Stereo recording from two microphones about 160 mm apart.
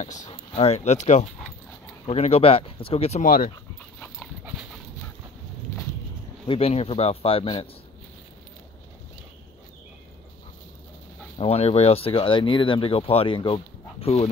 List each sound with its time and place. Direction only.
0.0 s speech: 50° left (ahead or behind)
3.2 s speech: 60° left (ahead or behind)
5.7 s a sound: 20° left (ahead or behind)
6.4 s speech: 35° left (ahead or behind)
11.3 s speech: 40° left (ahead or behind)